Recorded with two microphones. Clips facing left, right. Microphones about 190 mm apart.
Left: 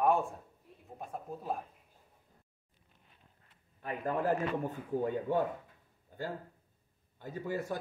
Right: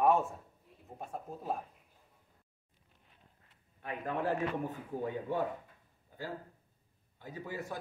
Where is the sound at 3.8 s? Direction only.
40° left (ahead or behind).